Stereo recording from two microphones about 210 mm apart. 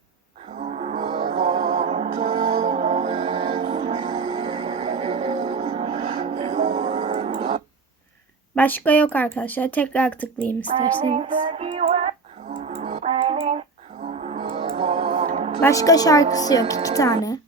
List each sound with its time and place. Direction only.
0.5 s music: 35° right (ahead or behind)
1.5 s music: 35° right (ahead or behind)
8.5 s speech: 10° left (ahead or behind)
11.0 s music: 30° right (ahead or behind)
15.6 s speech: 15° left (ahead or behind)